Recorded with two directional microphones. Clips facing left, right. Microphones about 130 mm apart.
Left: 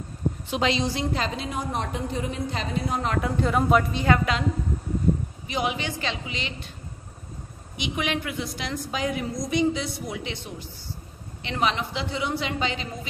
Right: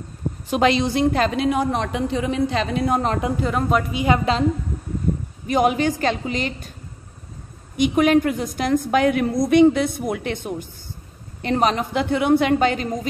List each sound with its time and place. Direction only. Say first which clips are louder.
0.5 s a woman's voice: right 7 dB; 55° right (ahead or behind)
3.3 s speech: even; centre (ahead or behind)
3.9 s a woman's voice: right 3 dB; 15° right (ahead or behind)
5.5 s a woman's voice: right 10 dB; 45° right (ahead or behind)
7.7 s a woman's voice: right 12 dB; 45° right (ahead or behind)